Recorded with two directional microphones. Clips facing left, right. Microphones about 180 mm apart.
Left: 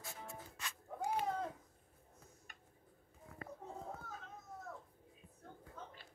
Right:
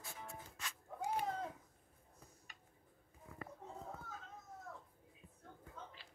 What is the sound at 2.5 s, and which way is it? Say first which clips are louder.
Tick-tock: left 1 dB; 50° left (ahead or behind).